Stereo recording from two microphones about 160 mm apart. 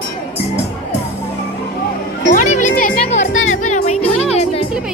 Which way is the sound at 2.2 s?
50° left (ahead or behind).